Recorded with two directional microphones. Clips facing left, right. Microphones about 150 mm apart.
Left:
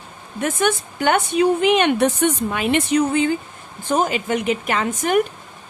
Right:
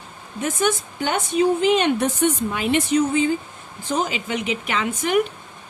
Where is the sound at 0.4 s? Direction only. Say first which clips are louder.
Left 2 dB; 60° left (ahead or behind).